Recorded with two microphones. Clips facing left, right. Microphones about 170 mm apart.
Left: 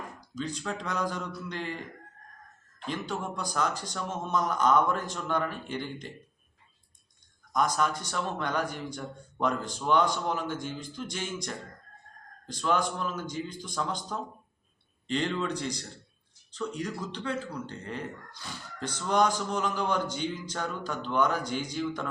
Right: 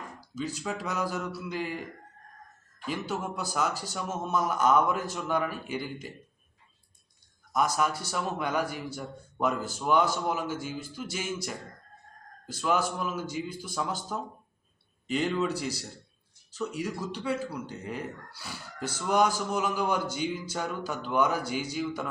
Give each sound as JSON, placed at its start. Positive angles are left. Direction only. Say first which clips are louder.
{"t": 0.2, "sound": "speech", "louder": "right 2 dB", "side_deg": -5}
{"t": 7.5, "sound": "speech", "louder": "even", "side_deg": -10}